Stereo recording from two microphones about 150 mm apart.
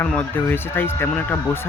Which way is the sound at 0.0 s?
10° left (ahead or behind).